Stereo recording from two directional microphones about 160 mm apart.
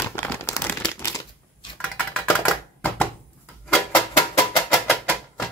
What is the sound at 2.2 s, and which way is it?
Typewriter, 15° left (ahead or behind).